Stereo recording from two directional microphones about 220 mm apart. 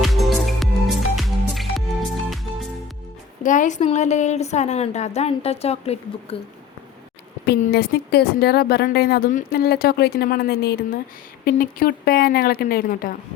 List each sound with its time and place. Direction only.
0.0 s music: centre (ahead or behind)
3.4 s a woman's voice: 35° left (ahead or behind)
7.6 s speech: 45° left (ahead or behind)